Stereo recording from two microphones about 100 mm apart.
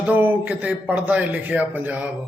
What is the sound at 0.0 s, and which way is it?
A man's voice, 20° right (ahead or behind).